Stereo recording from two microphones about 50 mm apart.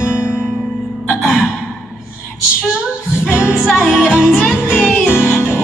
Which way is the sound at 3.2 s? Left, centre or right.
Left.